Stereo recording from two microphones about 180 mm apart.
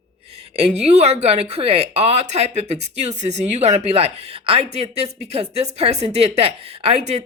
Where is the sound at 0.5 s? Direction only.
35° right (ahead or behind).